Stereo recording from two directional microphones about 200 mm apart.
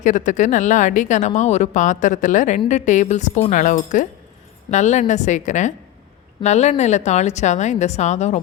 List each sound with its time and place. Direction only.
0.0 s speech: 40° left (ahead or behind)